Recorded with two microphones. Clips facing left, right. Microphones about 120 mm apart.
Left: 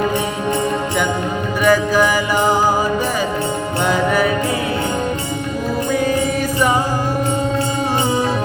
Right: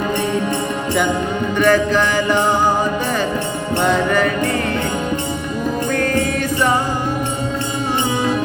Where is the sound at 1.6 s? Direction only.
10° left (ahead or behind).